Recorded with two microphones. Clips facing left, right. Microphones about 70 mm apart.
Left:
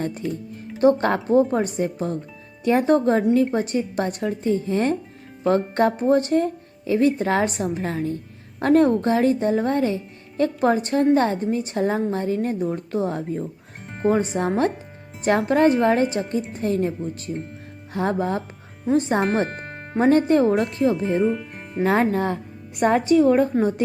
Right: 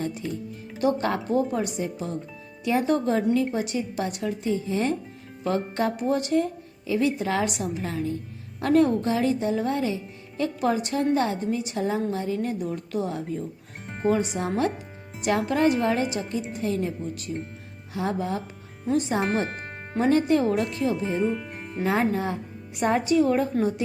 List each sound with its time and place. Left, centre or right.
0.2 s music: centre
0.8 s speech: left
13.7 s music: centre
14.1 s speech: left
19.5 s music: centre
20.0 s speech: left
21.2 s speech: centre
21.8 s a woman's voice: left
23.0 s speech: left